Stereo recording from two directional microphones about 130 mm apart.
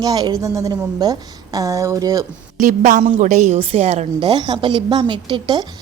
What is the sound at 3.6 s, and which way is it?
Speech, 60° right (ahead or behind).